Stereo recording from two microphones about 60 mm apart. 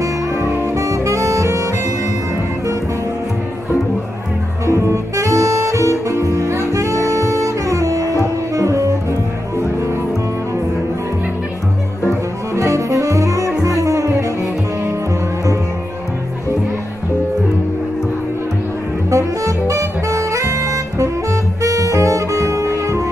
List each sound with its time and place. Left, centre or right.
0.7 s saxophone: right
4.6 s music: right
12.5 s music: right
19.0 s saxophone: right